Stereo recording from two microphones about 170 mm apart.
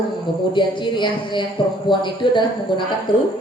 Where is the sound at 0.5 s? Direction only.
30° left (ahead or behind).